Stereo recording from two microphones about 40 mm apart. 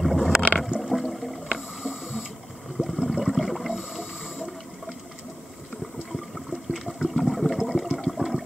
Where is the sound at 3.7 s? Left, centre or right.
Centre.